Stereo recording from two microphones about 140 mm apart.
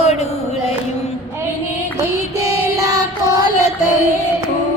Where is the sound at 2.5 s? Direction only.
25° right (ahead or behind).